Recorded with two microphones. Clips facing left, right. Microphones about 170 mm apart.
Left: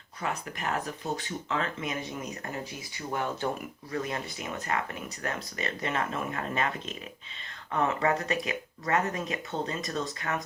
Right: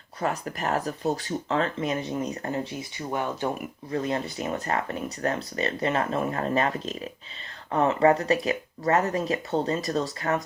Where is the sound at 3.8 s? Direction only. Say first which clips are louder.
Right 6 dB; 30° right (ahead or behind).